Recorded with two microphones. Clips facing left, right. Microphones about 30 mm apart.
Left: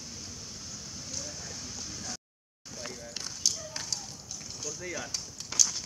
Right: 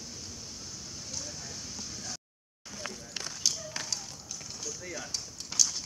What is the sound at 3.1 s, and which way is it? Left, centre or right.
Tap, right.